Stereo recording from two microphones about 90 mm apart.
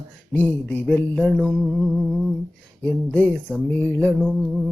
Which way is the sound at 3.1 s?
15° left (ahead or behind).